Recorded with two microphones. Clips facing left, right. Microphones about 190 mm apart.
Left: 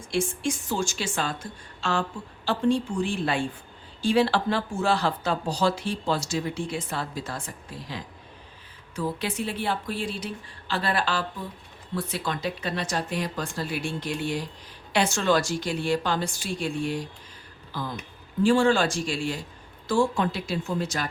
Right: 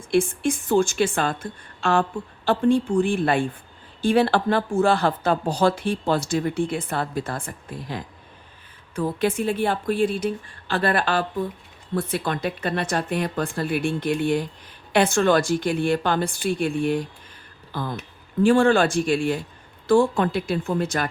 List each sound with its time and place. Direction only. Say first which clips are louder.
0.1 s a woman's voice: right 6 dB; 55° right (ahead or behind)